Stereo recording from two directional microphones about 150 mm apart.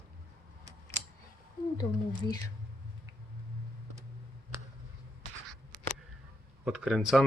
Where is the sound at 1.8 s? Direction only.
25° left (ahead or behind).